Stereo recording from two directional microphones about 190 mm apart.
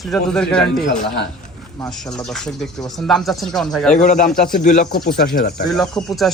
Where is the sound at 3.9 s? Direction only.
40° left (ahead or behind).